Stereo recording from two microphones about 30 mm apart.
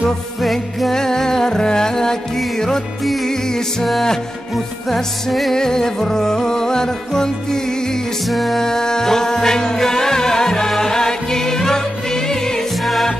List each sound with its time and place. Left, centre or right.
0.0 s music: centre
0.9 s music: centre
4.8 s music: centre
5.5 s music: centre
8.3 s music: centre
8.5 s music: centre